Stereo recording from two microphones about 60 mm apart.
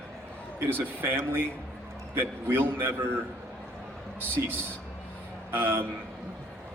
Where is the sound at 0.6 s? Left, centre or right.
Right.